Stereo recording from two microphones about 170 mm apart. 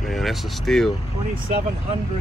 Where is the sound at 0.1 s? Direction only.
Centre (ahead or behind).